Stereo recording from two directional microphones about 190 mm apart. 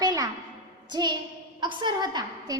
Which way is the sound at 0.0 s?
20° right (ahead or behind).